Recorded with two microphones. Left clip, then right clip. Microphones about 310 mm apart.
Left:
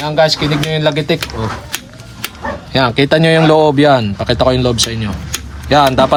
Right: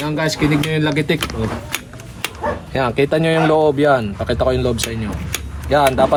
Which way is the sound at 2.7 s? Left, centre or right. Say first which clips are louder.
Left 6 dB; left.